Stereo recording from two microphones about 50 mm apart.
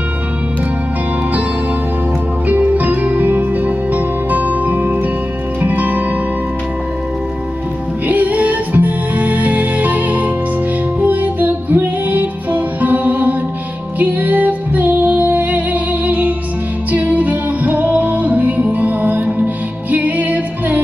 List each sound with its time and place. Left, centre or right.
2.4 s music: right
8.1 s music: right